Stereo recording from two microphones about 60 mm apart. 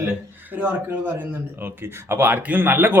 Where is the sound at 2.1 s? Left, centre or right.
Right.